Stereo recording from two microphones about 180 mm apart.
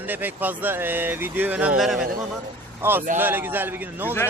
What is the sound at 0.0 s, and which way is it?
Speech, 10° right (ahead or behind).